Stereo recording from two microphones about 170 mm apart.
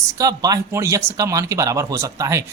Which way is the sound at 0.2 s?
20° right (ahead or behind).